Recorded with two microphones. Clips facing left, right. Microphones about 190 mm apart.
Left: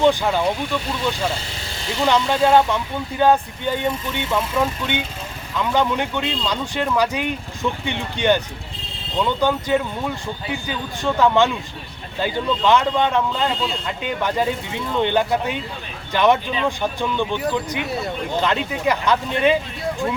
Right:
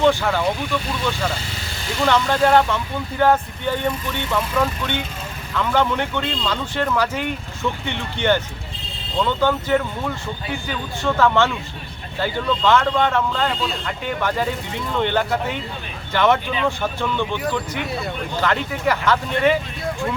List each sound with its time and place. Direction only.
0.0 s speech: 15° left (ahead or behind)
2.0 s speech: 15° left (ahead or behind)